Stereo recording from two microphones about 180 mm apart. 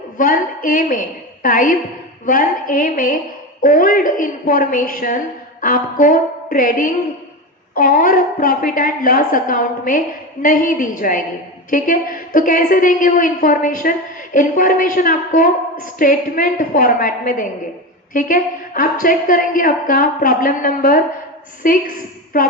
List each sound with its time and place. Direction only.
0.2 s a woman's voice: 50° left (ahead or behind)